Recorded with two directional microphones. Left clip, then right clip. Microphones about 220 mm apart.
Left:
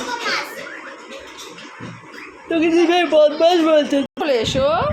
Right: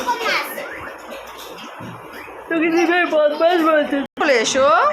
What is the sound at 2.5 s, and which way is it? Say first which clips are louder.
A man's voice: left 1 dB; 20° left (ahead or behind).